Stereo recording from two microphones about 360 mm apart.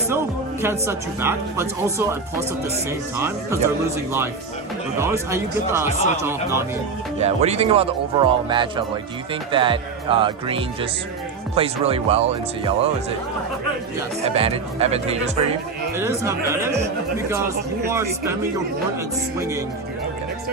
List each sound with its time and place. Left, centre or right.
0.6 s speech: centre
3.2 s speech: centre
4.9 s speech: centre
7.2 s speech: centre
14.3 s speech: centre
19.4 s speech: centre